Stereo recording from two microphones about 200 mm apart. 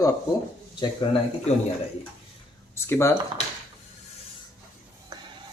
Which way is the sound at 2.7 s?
15° left (ahead or behind).